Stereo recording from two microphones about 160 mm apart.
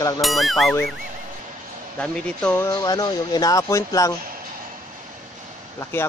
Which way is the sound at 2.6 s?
25° left (ahead or behind).